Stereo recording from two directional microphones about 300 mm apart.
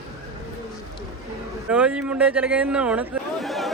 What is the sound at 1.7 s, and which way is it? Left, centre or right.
Speech, centre.